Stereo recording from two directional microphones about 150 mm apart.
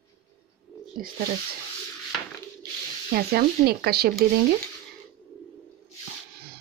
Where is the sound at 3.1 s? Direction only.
90° right.